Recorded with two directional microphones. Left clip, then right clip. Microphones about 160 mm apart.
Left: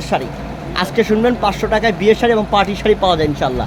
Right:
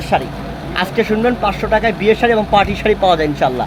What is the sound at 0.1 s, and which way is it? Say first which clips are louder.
Speech: right 3 dB; 25° left (ahead or behind).